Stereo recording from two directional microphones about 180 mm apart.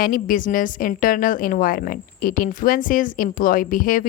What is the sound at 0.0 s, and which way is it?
A woman's voice, 50° left (ahead or behind).